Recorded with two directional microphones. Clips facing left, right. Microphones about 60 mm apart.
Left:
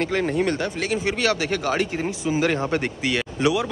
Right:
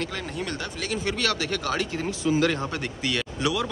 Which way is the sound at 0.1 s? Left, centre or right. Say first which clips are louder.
Left 10 dB; left.